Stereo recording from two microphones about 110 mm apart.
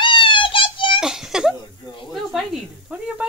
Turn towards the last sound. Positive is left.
turn(degrees=-10)  # may be behind; listen again after turning